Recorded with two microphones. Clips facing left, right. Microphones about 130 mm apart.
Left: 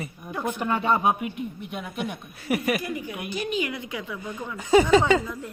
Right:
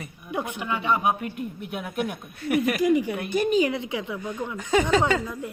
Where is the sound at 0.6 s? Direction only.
45° left (ahead or behind).